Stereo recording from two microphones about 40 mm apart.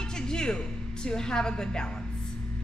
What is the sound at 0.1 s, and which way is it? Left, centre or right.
A woman's voice, centre.